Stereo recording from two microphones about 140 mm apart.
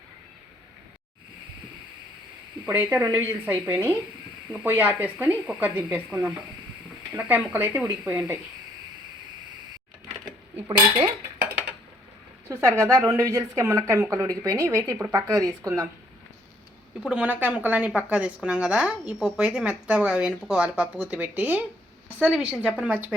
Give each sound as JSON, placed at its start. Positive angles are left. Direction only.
{"t": 2.6, "sound": "a woman's voice", "side_deg": -10}
{"t": 10.7, "sound": "speech", "side_deg": -40}
{"t": 12.5, "sound": "a woman's voice", "side_deg": -20}
{"t": 17.0, "sound": "a woman's voice", "side_deg": -5}